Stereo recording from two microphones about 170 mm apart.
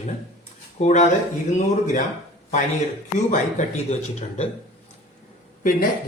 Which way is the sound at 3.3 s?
45° left (ahead or behind).